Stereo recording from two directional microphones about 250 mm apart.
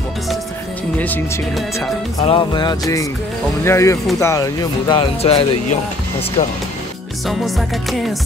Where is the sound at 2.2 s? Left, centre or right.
Centre.